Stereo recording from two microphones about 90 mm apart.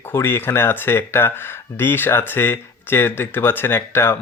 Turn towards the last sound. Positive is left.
turn(degrees=25)  # may be behind; listen again after turning